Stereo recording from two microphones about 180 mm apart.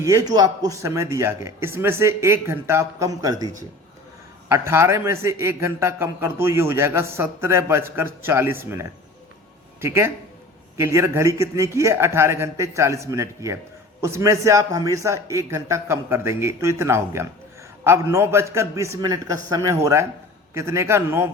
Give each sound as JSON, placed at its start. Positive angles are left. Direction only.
{"t": 0.0, "sound": "a man's voice", "side_deg": -15}